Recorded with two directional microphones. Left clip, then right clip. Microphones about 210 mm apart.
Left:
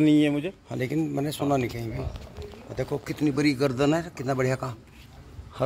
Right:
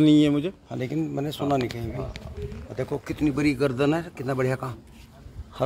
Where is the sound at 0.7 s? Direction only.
10° left (ahead or behind).